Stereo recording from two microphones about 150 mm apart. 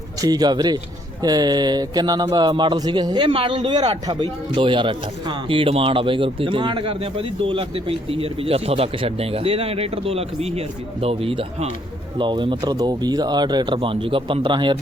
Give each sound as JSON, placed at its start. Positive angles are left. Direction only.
{"t": 0.2, "sound": "speech", "side_deg": -25}